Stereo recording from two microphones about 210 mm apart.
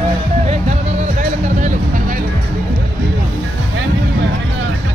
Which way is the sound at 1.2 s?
40° right (ahead or behind).